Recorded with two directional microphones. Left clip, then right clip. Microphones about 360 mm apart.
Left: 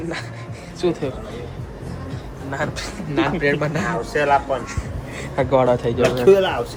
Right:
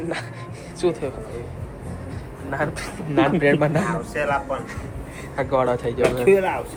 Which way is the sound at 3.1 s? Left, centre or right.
Centre.